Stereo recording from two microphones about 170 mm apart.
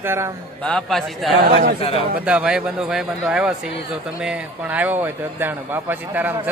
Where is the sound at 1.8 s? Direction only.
35° left (ahead or behind).